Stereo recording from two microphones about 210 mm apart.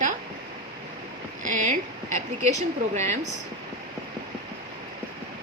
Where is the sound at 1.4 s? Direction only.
35° right (ahead or behind).